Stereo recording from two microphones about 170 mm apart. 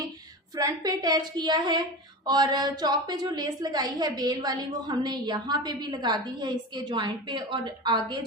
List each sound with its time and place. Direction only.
0.5 s a woman's voice: 20° right (ahead or behind)